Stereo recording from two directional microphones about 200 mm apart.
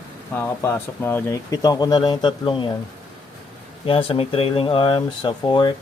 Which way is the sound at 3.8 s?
25° left (ahead or behind).